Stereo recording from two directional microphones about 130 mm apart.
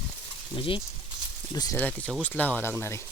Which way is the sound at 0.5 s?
40° left (ahead or behind).